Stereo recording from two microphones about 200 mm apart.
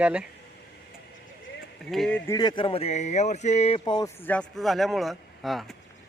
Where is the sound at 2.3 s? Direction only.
20° left (ahead or behind).